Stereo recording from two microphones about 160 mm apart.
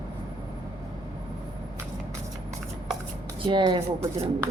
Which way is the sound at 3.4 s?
30° right (ahead or behind).